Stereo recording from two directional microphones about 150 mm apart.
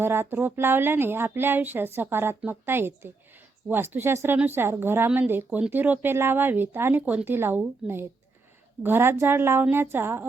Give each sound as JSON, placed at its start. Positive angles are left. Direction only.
{"t": 0.0, "sound": "speech", "side_deg": -15}